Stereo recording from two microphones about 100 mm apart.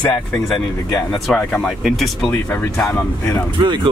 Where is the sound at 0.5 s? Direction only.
5° left (ahead or behind).